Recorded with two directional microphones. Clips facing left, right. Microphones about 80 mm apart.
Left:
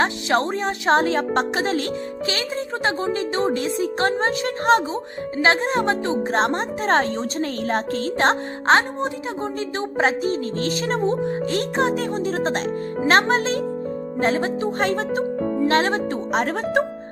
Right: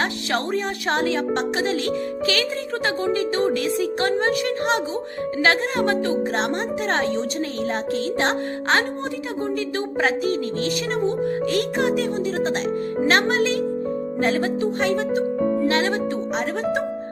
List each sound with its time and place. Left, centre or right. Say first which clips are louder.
0.0 s a woman's voice: left 4 dB; left
2.3 s a woman's voice: right 2 dB; left
6.3 s a woman's voice: left 2 dB; left
9.0 s a woman's voice: left 1 dB; left
16.3 s speech: left 5 dB; left